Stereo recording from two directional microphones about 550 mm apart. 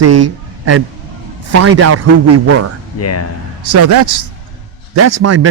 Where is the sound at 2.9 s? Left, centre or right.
Left.